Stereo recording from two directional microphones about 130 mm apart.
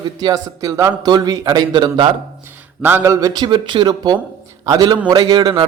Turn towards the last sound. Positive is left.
turn(degrees=-35)  # may be behind; listen again after turning